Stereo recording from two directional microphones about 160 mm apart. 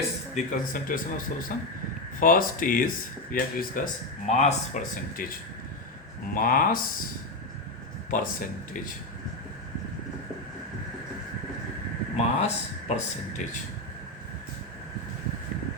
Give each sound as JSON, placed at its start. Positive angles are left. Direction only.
{"t": 0.3, "sound": "a man's voice", "side_deg": 55}
{"t": 4.3, "sound": "a man's voice", "side_deg": 45}
{"t": 8.1, "sound": "a man's voice", "side_deg": 55}
{"t": 12.1, "sound": "speech", "side_deg": 45}